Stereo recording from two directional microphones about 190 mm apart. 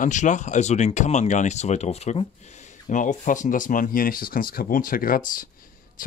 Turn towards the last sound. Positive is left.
turn(degrees=45)  # may be behind; listen again after turning